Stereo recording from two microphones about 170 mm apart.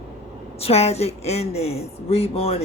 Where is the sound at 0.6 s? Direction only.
40° left (ahead or behind).